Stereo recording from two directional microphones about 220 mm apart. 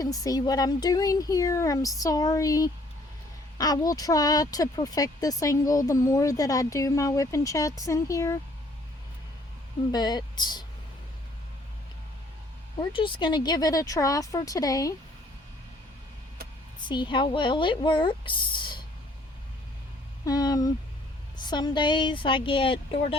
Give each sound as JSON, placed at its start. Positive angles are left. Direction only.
{"t": 0.0, "sound": "speech", "side_deg": 15}
{"t": 9.9, "sound": "speech", "side_deg": 20}
{"t": 12.8, "sound": "speech", "side_deg": 20}
{"t": 16.8, "sound": "speech", "side_deg": 20}
{"t": 20.2, "sound": "speech", "side_deg": 15}